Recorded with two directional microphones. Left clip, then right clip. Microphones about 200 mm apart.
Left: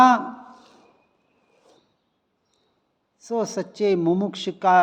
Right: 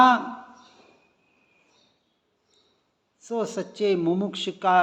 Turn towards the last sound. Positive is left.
turn(degrees=40)  # may be behind; listen again after turning